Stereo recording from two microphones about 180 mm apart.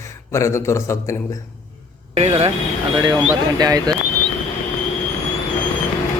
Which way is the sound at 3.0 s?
20° right (ahead or behind).